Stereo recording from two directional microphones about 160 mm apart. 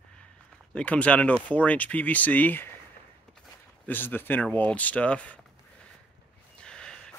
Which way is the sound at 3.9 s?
10° left (ahead or behind).